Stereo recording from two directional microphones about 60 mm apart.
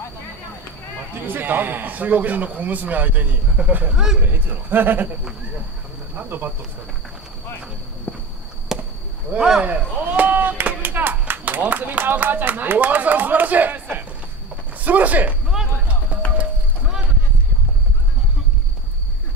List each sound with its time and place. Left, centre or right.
1.2 s speech: right
3.9 s speech: centre
4.3 s speech: right
6.1 s speech: right
8.1 s a sound: left
8.7 s chop: centre
9.4 s speech: centre
9.7 s speech: right
10.8 s a sound: right
11.6 s speech: right
15.5 s a sound: centre
16.1 s music: right